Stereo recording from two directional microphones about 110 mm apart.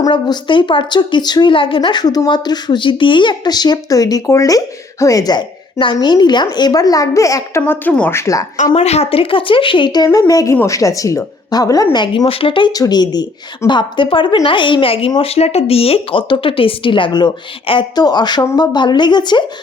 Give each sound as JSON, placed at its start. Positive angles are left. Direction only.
{"t": 0.1, "sound": "a woman's voice", "side_deg": 50}
{"t": 7.7, "sound": "speech", "side_deg": 15}
{"t": 8.7, "sound": "a woman's voice", "side_deg": 75}
{"t": 11.9, "sound": "speech", "side_deg": 50}
{"t": 12.7, "sound": "a woman's voice", "side_deg": 35}
{"t": 15.2, "sound": "speech", "side_deg": 70}